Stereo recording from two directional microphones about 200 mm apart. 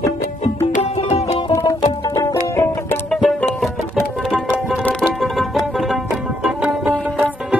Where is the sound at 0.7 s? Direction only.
30° left (ahead or behind).